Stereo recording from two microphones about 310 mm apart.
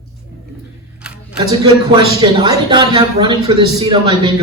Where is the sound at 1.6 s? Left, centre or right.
Centre.